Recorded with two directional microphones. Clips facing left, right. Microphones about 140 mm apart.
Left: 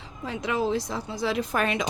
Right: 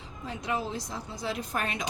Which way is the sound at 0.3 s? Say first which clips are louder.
Left 6 dB; 90° left.